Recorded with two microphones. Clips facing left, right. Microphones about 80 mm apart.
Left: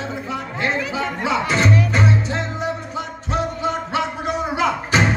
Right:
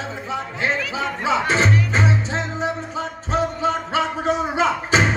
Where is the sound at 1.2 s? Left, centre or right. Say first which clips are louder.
Right 1 dB; right.